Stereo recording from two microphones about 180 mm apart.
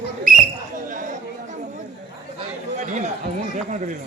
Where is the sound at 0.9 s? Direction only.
45° right (ahead or behind).